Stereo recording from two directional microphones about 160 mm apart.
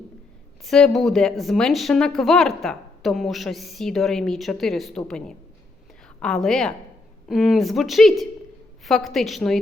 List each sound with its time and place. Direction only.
0.6 s a woman's voice: centre (ahead or behind)